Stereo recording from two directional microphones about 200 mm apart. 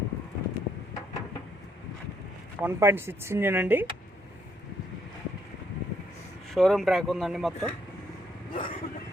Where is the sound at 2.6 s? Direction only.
10° right (ahead or behind).